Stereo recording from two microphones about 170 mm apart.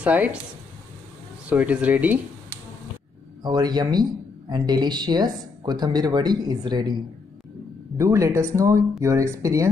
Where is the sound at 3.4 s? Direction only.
25° right (ahead or behind).